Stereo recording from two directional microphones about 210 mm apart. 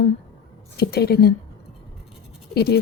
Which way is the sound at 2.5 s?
50° left (ahead or behind).